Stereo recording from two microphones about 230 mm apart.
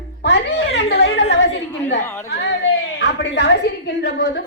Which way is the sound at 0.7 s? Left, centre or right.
Left.